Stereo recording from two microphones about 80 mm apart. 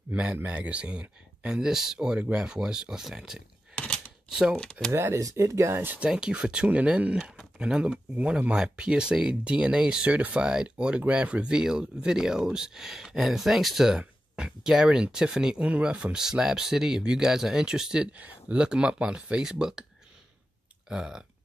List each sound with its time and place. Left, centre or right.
0.1 s speech: centre
3.7 s a sound: centre
4.3 s speech: centre
4.9 s speech: right
5.9 s speech: centre
7.2 s speech: centre
20.9 s speech: centre